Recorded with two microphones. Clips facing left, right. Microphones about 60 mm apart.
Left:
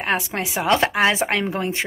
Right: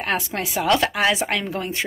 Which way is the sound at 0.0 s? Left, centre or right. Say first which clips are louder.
Left 1 dB; left.